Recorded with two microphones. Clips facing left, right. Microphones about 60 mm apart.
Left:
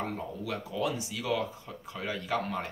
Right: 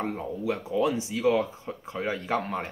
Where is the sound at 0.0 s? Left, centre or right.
Right.